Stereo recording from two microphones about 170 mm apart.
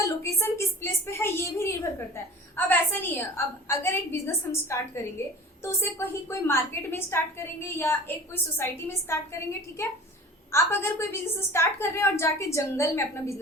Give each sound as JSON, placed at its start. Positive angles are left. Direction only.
{"t": 0.0, "sound": "a woman's voice", "side_deg": 15}